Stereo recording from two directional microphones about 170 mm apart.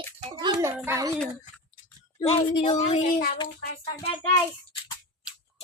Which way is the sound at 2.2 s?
30° left (ahead or behind).